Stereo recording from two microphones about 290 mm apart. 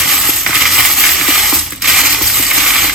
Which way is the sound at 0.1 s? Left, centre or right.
Centre.